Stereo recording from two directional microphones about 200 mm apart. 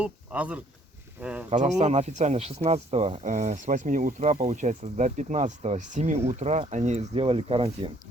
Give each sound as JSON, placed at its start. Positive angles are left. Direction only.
{"t": 0.0, "sound": "speech", "side_deg": -5}
{"t": 1.5, "sound": "speech", "side_deg": -35}